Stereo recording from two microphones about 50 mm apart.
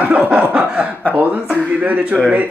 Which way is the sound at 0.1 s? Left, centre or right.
Right.